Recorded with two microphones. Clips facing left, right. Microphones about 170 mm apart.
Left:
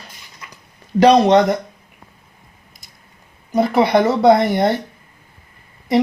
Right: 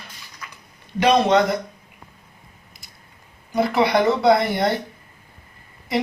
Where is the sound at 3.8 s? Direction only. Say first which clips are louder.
Left 4 dB; 20° left (ahead or behind).